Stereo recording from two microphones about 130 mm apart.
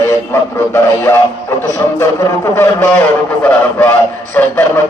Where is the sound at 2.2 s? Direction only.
20° left (ahead or behind).